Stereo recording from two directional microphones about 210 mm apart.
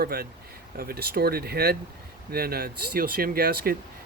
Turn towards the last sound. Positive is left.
turn(degrees=-45)  # may be behind; listen again after turning